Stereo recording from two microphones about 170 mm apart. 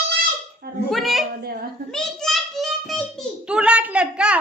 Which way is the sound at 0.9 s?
Centre (ahead or behind).